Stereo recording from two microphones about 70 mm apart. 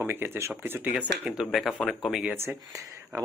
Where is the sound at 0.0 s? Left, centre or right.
Right.